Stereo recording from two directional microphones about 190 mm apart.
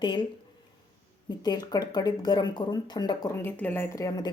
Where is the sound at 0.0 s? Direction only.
25° left (ahead or behind).